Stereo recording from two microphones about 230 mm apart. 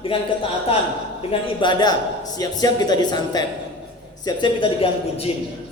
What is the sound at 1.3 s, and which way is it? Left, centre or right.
A man's voice, left.